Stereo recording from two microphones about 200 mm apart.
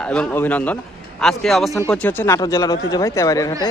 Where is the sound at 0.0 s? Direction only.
5° left (ahead or behind).